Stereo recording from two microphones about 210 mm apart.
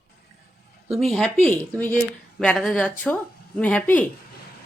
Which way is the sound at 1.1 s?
5° left (ahead or behind).